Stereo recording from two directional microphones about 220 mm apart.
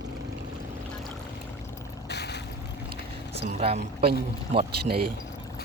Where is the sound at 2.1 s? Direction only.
50° left (ahead or behind).